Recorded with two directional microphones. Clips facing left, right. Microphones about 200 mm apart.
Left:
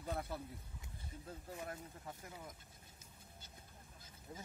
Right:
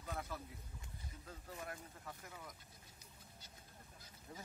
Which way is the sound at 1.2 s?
25° left (ahead or behind).